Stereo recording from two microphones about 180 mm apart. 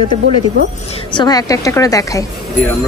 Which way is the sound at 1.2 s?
20° left (ahead or behind).